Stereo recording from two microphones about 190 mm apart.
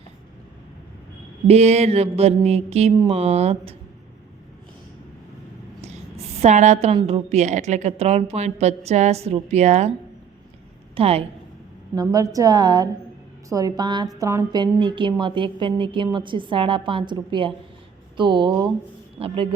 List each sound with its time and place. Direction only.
1.5 s a woman's voice: 35° right (ahead or behind)
5.8 s a sound: 35° right (ahead or behind)
6.9 s a woman's voice: 35° right (ahead or behind)
10.9 s a woman's voice: 30° right (ahead or behind)
11.9 s a woman's voice: 20° right (ahead or behind)